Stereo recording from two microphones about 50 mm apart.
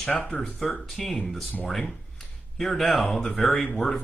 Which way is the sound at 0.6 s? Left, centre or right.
Centre.